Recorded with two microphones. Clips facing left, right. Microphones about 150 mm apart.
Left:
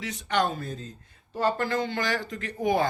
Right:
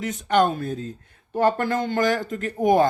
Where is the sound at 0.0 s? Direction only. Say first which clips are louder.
Right 7 dB; 45° right (ahead or behind).